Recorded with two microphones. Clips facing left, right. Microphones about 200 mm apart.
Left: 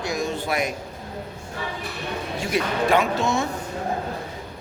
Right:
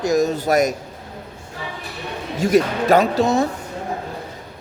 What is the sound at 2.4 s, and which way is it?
A man's voice, 40° right (ahead or behind).